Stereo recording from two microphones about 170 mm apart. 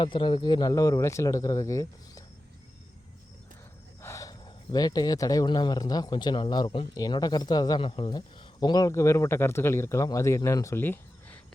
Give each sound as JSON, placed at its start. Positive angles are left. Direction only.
{"t": 0.0, "sound": "speech", "side_deg": 30}
{"t": 4.0, "sound": "speech", "side_deg": 20}